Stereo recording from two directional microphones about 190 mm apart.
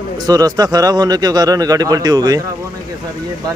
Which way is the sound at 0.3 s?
20° right (ahead or behind).